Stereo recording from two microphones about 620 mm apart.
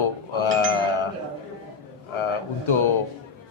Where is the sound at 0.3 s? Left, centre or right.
Left.